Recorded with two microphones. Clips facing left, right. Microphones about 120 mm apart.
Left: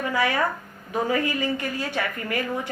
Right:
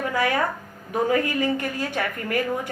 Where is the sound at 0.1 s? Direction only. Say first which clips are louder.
Even; 50° right (ahead or behind).